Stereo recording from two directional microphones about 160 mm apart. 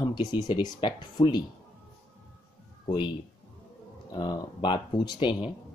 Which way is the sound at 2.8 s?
30° left (ahead or behind).